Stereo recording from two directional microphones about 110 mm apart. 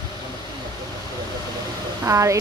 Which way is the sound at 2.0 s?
30° right (ahead or behind).